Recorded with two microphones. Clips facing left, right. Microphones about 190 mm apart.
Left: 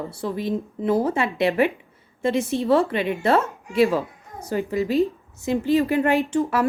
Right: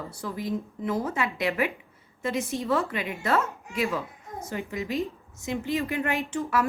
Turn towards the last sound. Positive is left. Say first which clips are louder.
# left 6 dB
turn(degrees=30)  # may be behind; listen again after turning